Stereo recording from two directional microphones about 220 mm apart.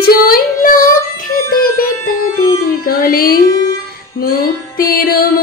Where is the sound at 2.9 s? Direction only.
40° left (ahead or behind).